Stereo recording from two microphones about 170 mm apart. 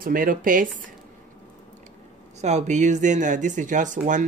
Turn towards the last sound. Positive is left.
turn(degrees=-45)  # may be behind; listen again after turning